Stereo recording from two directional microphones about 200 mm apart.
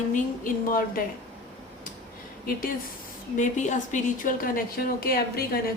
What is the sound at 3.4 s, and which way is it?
A woman's voice, 35° left (ahead or behind).